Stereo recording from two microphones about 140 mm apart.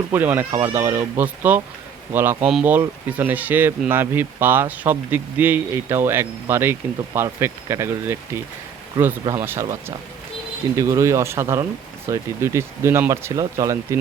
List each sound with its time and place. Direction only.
0.1 s speech: 15° right (ahead or behind)
9.3 s speech: 20° right (ahead or behind)